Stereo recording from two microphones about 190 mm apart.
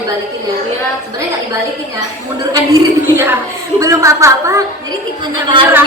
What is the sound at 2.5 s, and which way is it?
A woman's voice, 20° right (ahead or behind).